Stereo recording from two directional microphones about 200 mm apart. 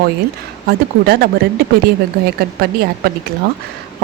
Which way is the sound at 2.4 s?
50° right (ahead or behind).